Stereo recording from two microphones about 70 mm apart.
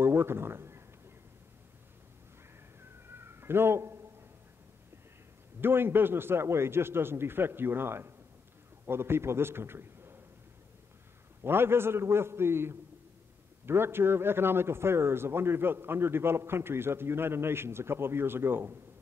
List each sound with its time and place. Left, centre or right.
0.0 s a sound: right
3.1 s cat: right
5.6 s a man's voice: right
11.4 s a man's voice: right